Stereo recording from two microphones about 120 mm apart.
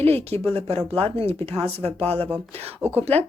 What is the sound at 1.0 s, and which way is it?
Speech, 55° right (ahead or behind).